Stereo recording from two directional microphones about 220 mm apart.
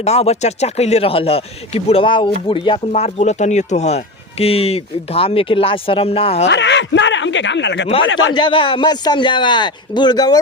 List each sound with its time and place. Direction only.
0.0 s speech: 30° left (ahead or behind)
6.5 s speech: 50° left (ahead or behind)
8.3 s speech: 20° left (ahead or behind)